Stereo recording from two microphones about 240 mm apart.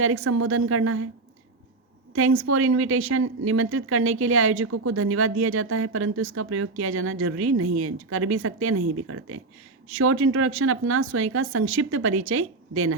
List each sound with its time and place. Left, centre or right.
0.0 s a woman's voice: right
2.1 s a woman's voice: right